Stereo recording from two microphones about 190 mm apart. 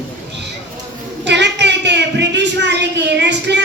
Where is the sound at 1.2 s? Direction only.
65° right (ahead or behind).